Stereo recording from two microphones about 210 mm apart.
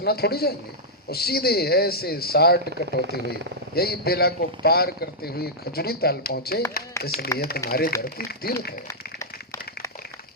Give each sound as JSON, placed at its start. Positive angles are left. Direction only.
{"t": 0.0, "sound": "a man's voice", "side_deg": 50}
{"t": 2.8, "sound": "speech", "side_deg": -55}
{"t": 3.8, "sound": "a man's voice", "side_deg": 45}